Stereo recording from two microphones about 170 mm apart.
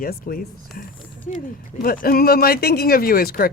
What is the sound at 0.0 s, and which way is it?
Speech, 60° left (ahead or behind).